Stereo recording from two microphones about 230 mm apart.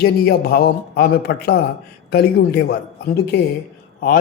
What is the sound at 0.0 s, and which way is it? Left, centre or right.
A man's voice, left.